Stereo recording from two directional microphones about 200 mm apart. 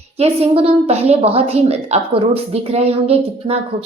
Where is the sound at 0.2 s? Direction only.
30° right (ahead or behind).